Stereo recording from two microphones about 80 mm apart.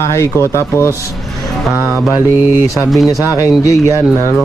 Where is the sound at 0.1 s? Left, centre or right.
Left.